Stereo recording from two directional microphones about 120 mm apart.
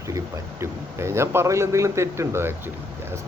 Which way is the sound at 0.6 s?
20° right (ahead or behind).